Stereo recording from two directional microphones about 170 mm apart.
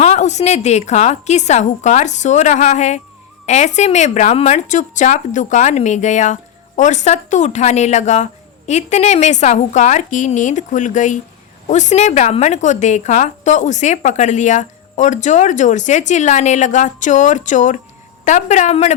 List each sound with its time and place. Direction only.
0.0 s a woman's voice: 40° left (ahead or behind)